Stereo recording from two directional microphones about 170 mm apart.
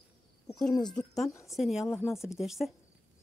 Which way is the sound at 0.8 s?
5° left (ahead or behind).